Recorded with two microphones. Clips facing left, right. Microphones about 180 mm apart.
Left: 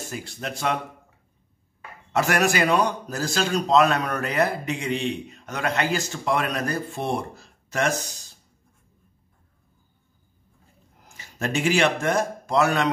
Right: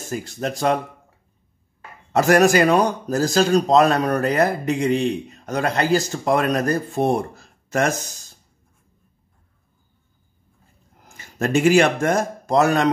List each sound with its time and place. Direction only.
0.0 s speech: 45° right (ahead or behind)
2.1 s speech: 40° right (ahead or behind)
11.1 s speech: 45° right (ahead or behind)